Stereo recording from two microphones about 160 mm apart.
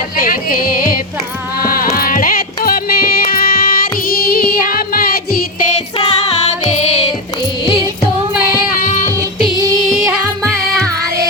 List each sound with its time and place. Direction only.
0.2 s music: 60° left (ahead or behind)
6.0 s music: 45° left (ahead or behind)
8.5 s singing: 55° left (ahead or behind)
9.6 s music: 20° right (ahead or behind)